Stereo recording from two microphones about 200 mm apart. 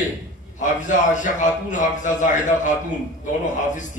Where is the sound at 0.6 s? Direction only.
40° left (ahead or behind).